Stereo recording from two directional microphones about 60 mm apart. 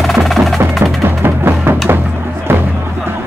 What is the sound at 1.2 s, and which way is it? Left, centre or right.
Music, right.